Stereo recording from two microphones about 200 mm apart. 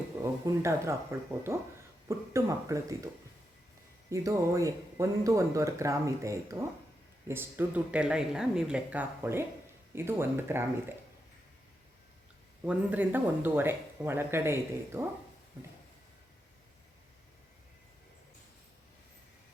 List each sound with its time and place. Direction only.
0.4 s speech: 15° right (ahead or behind)
4.1 s speech: 15° right (ahead or behind)
12.6 s speech: 10° right (ahead or behind)